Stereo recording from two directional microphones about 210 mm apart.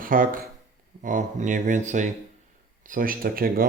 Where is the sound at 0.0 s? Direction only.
40° right (ahead or behind).